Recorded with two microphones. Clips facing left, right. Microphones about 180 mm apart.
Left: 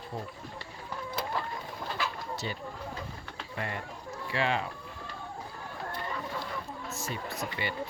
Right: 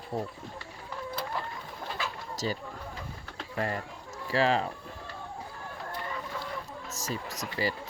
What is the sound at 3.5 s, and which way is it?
Speech, 35° right (ahead or behind).